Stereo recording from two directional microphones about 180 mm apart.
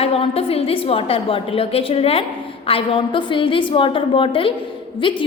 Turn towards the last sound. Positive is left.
turn(degrees=30)  # may be behind; listen again after turning